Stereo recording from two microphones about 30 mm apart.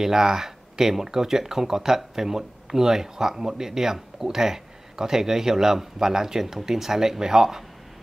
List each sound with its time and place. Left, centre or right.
0.0 s speech: centre